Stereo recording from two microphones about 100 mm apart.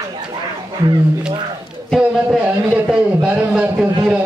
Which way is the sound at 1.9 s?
10° right (ahead or behind).